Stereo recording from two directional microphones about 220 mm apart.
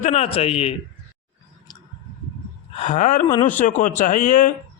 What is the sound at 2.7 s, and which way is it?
A man's voice, 30° left (ahead or behind).